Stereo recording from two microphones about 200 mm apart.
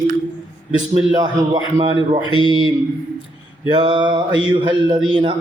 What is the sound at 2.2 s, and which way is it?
Speech, 25° left (ahead or behind).